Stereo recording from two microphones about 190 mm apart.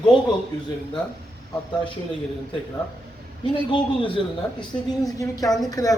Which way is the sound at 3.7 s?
25° left (ahead or behind).